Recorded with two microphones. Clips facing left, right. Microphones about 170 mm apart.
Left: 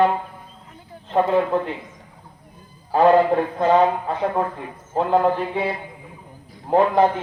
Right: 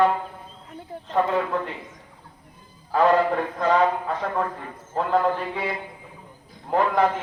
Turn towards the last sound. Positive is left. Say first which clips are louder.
# left 4 dB
turn(degrees=30)  # may be behind; listen again after turning